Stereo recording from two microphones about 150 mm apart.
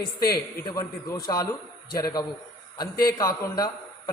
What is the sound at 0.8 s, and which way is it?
A man's voice, 25° left (ahead or behind).